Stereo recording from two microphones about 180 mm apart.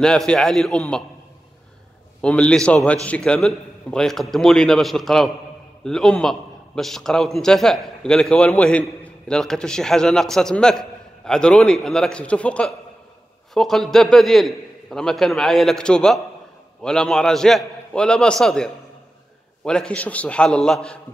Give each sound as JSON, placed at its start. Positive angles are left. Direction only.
{"t": 0.0, "sound": "a man's voice", "side_deg": 5}
{"t": 2.2, "sound": "a man's voice", "side_deg": 5}